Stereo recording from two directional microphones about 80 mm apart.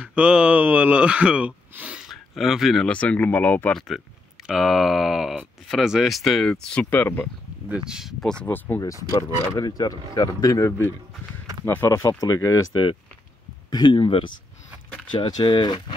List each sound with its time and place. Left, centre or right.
0.0 s speech: centre
2.0 s a sound: centre
2.8 s speech: centre
3.7 s a sound: centre
6.6 s speech: centre
7.6 s speech: centre
8.2 s speech: centre
8.5 s speech: left
8.8 s speech: left
11.6 s speech: left
12.1 s speech: left
13.7 s speech: left